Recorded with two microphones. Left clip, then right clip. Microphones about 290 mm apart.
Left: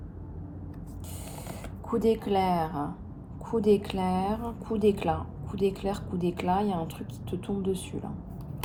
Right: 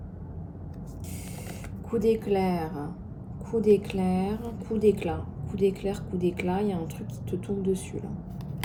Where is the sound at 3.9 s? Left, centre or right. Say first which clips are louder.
Left 1 dB; centre.